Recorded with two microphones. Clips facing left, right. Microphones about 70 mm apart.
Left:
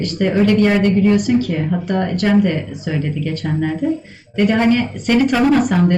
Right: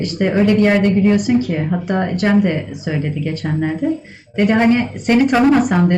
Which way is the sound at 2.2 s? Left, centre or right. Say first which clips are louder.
Even; centre.